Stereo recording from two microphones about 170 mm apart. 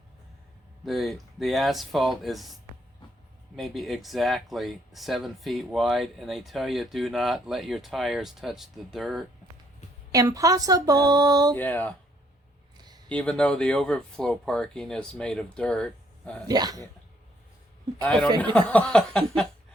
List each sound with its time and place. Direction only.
0.9 s speech: centre (ahead or behind)
10.1 s a sound: 20° right (ahead or behind)
11.5 s speech: 10° left (ahead or behind)
13.1 s speech: 5° left (ahead or behind)
16.5 s a sound: 20° right (ahead or behind)
18.5 s speech: 5° left (ahead or behind)